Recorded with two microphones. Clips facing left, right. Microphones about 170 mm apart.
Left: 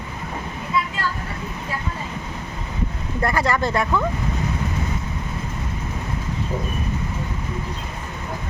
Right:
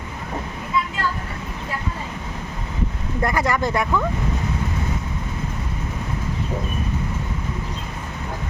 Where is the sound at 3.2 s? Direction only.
15° right (ahead or behind).